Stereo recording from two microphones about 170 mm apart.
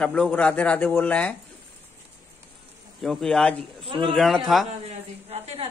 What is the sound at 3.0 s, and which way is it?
Speech, centre (ahead or behind).